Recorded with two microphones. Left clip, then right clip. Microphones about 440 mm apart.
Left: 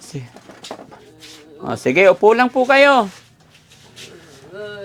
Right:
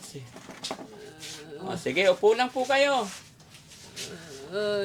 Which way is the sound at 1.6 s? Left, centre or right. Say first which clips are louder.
Left 11 dB; left.